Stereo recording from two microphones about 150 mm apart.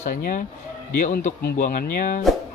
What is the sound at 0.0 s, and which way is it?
Speech, 60° left (ahead or behind).